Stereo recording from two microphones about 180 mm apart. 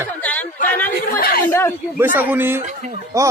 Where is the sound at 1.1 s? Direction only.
55° left (ahead or behind).